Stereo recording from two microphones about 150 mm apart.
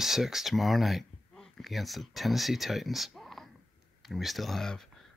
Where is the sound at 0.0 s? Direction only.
Centre (ahead or behind).